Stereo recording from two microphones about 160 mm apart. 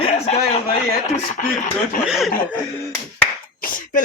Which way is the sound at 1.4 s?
60° left (ahead or behind).